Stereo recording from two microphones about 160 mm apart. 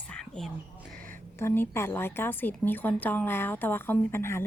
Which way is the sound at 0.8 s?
60° right (ahead or behind).